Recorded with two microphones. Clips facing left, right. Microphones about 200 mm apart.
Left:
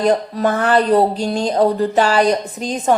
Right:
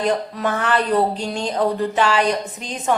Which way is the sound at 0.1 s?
35° left (ahead or behind).